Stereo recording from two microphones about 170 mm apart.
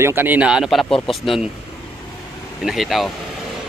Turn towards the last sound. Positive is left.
turn(degrees=0)  # may be behind; listen again after turning